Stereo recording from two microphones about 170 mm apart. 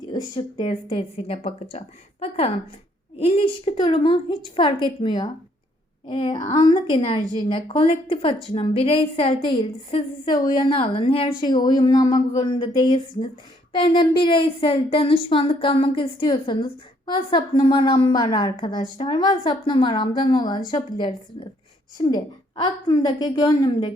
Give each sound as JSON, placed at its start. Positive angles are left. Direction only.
{"t": 0.3, "sound": "a woman's voice", "side_deg": 30}
{"t": 22.0, "sound": "a woman's voice", "side_deg": 25}